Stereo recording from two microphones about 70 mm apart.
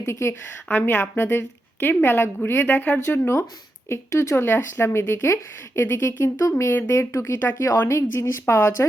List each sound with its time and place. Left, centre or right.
0.0 s speech: left
0.7 s speech: left
3.0 s speech: left